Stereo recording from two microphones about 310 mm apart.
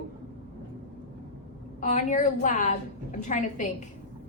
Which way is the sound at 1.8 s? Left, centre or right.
Left.